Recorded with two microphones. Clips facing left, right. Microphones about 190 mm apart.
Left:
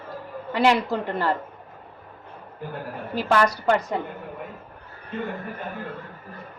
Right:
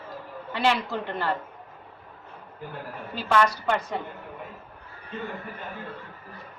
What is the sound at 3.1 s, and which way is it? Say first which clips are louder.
Speech: left 2 dB; 40° left (ahead or behind).